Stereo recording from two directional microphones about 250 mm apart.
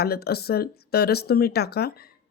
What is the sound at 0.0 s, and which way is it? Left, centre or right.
Speech, left.